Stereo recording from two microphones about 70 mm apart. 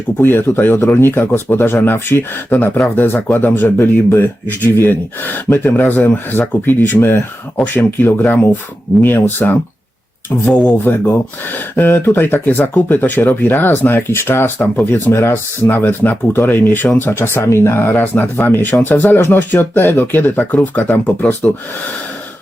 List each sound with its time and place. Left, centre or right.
0.2 s speech: left
15.1 s speech: left
15.6 s speech: left